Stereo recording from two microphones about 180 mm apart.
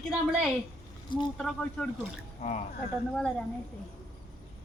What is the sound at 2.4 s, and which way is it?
Speech, 35° left (ahead or behind).